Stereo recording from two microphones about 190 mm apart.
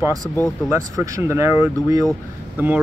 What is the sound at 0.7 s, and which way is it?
Speech, 15° right (ahead or behind).